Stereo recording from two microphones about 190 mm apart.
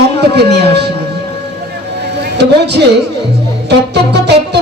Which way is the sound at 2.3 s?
60° right (ahead or behind).